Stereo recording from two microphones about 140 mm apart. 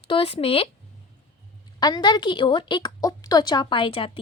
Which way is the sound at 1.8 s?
30° left (ahead or behind).